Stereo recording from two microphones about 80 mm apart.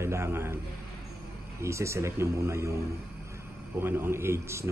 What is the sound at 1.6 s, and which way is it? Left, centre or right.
Speech, right.